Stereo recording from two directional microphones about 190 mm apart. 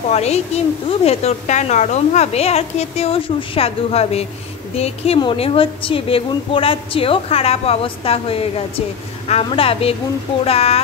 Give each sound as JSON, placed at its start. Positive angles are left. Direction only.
{"t": 0.1, "sound": "a woman's voice", "side_deg": 35}